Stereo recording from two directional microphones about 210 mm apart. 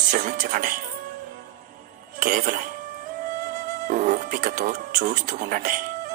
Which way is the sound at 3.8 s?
40° right (ahead or behind).